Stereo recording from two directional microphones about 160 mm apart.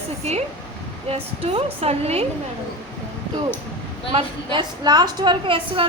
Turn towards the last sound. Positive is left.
turn(degrees=-35)  # may be behind; listen again after turning